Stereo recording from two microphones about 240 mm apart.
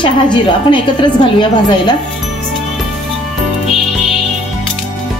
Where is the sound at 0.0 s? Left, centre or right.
Centre.